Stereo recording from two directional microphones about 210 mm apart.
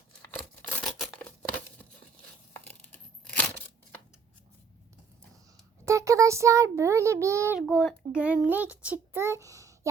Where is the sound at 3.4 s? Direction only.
10° left (ahead or behind).